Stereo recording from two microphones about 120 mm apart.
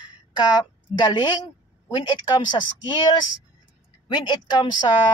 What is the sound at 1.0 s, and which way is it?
Speech, 35° left (ahead or behind).